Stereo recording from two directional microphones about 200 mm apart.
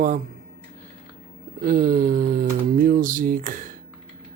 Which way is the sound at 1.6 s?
45° right (ahead or behind).